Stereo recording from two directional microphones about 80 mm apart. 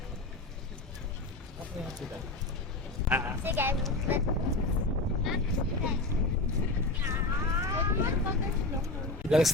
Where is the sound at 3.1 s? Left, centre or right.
Right.